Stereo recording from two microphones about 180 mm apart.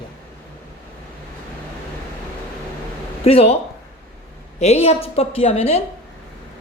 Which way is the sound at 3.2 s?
35° left (ahead or behind).